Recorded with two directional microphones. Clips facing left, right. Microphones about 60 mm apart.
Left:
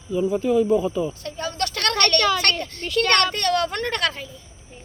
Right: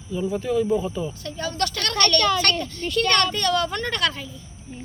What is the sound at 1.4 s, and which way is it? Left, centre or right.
A woman's voice, left.